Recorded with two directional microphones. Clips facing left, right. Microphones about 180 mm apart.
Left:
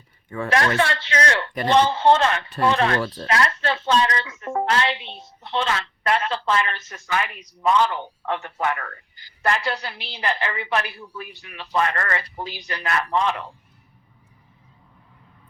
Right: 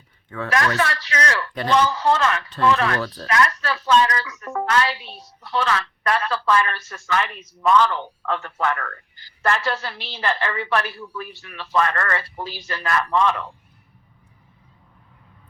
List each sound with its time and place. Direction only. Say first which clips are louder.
0.4 s a woman's voice: left 1 dB; 30° left (ahead or behind)